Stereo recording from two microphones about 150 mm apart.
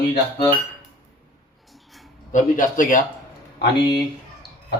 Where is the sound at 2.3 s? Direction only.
60° left (ahead or behind).